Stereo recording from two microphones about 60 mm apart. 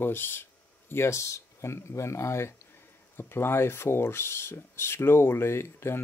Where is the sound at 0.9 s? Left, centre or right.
Left.